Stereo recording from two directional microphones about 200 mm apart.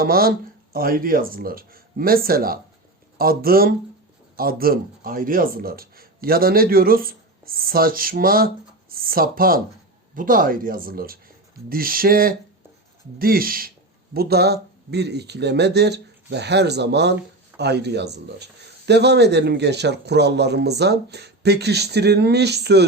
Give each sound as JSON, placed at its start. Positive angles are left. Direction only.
{"t": 0.0, "sound": "a man's voice", "side_deg": -50}